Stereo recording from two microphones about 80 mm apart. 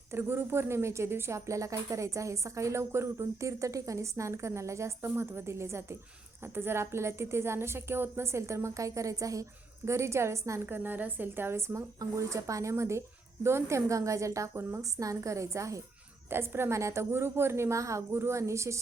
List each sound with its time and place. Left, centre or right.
0.1 s a woman's voice: right
10.8 s a woman's voice: right
16.3 s a woman's voice: right